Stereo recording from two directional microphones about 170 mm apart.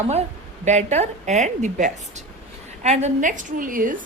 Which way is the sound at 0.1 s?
40° right (ahead or behind).